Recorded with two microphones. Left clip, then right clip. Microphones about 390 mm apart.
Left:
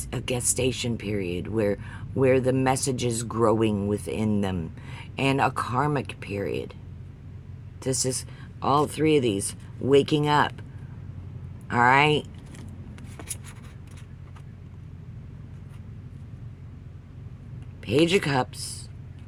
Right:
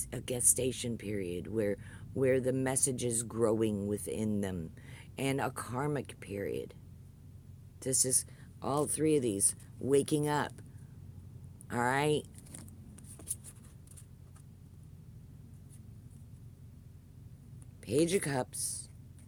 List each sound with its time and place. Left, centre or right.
0.0 s speech: right
7.8 s speech: right
11.7 s speech: right
12.5 s a sound: right
17.8 s speech: right